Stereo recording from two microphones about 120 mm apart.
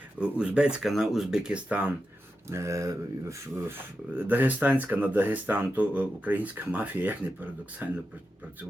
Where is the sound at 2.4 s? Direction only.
25° right (ahead or behind).